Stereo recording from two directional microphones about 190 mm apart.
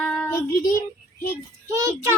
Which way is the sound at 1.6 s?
15° right (ahead or behind).